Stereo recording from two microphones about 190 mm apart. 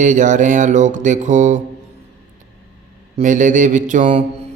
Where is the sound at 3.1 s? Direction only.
40° right (ahead or behind).